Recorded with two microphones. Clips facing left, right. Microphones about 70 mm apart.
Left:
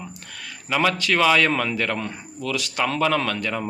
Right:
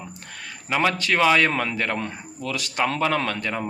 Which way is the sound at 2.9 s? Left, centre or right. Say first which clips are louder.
Left 2 dB; right.